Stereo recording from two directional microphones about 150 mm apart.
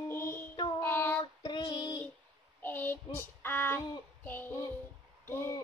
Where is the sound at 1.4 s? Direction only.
30° left (ahead or behind).